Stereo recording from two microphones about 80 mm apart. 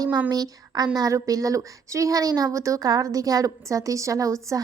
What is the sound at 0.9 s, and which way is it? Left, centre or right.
A woman's voice, right.